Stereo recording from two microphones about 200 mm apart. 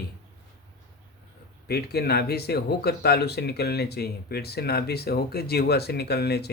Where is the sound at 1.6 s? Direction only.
55° left (ahead or behind).